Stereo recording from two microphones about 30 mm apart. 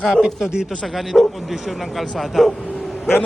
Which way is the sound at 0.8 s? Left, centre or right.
Centre.